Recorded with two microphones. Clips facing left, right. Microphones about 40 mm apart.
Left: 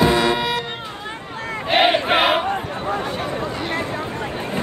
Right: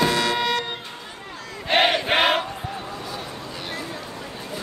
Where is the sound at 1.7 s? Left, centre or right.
Centre.